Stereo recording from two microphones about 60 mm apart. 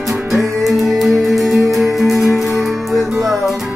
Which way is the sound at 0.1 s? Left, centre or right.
Centre.